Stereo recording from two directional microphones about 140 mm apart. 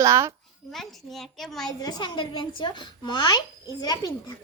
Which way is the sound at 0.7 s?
Centre (ahead or behind).